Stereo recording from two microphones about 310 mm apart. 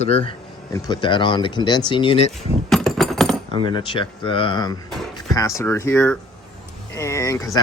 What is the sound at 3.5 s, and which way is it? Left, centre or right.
Speech, centre.